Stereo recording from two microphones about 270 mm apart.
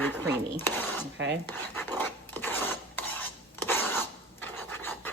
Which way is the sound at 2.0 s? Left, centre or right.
Centre.